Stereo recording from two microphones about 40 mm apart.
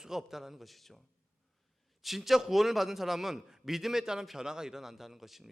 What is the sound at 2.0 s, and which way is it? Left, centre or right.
A man's voice, centre.